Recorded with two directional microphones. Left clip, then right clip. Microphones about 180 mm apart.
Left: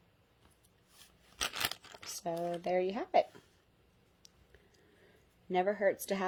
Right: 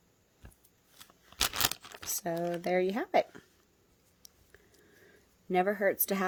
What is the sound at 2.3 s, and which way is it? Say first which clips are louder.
Speech: right 3 dB; 40° right (ahead or behind).